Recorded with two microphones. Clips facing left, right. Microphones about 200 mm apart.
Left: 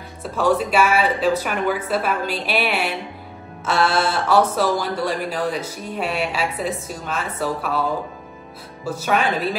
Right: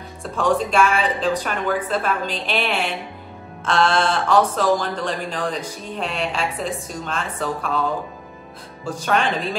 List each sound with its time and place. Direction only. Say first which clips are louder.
0.2 s speech: left 1 dB; 5° left (ahead or behind)
8.8 s speech: even; 5° left (ahead or behind)